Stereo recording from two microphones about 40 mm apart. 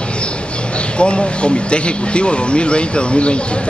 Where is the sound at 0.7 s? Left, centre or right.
Left.